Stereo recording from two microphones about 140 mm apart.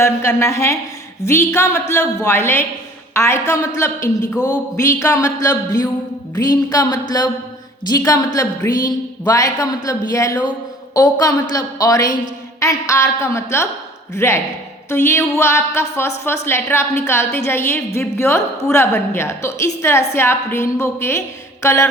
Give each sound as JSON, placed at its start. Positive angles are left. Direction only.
{"t": 0.0, "sound": "a woman's voice", "side_deg": 20}